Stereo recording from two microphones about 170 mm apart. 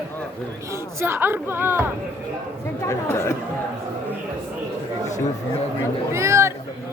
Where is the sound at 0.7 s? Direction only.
15° right (ahead or behind).